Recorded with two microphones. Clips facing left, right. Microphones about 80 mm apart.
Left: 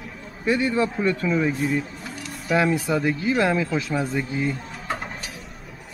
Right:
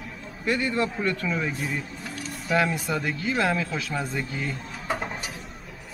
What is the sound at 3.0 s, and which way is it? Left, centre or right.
Speech, centre.